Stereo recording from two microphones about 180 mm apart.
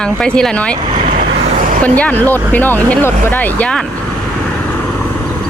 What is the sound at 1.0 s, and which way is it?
Vehicle, 50° right (ahead or behind).